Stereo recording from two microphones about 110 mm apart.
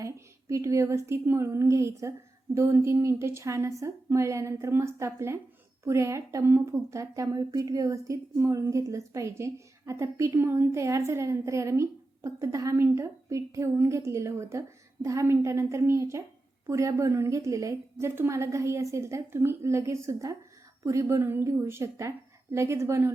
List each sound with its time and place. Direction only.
0.0 s a woman's voice: 25° right (ahead or behind)